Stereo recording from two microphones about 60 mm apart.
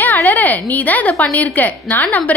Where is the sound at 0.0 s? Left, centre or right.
Left.